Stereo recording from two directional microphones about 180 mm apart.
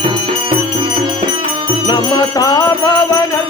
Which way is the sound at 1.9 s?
20° left (ahead or behind).